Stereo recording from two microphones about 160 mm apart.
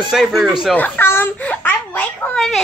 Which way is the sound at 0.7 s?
10° left (ahead or behind).